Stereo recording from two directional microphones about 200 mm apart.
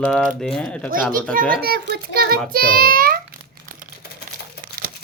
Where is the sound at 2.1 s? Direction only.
50° right (ahead or behind).